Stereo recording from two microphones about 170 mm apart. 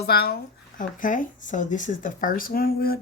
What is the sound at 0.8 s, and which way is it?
Speech, 50° left (ahead or behind).